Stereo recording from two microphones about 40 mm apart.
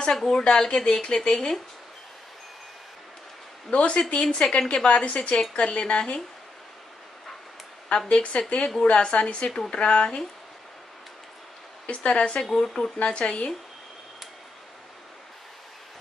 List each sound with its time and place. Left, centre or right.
0.3 s speech: centre
3.7 s a woman's voice: left
8.1 s a woman's voice: left
11.8 s speech: left
12.4 s speech: centre
13.0 s speech: left